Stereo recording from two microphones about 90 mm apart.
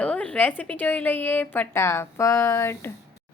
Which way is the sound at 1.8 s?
30° left (ahead or behind).